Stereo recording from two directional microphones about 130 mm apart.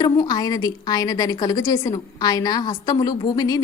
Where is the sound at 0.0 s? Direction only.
30° left (ahead or behind).